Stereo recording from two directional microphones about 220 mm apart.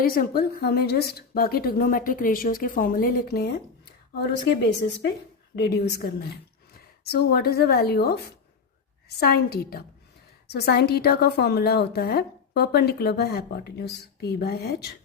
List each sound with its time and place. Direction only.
0.0 s a woman's voice: 45° left (ahead or behind)